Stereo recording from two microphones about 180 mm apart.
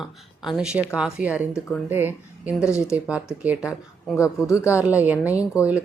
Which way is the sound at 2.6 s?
15° left (ahead or behind).